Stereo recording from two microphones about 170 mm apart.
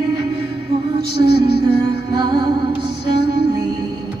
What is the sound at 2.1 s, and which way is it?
Music, 25° right (ahead or behind).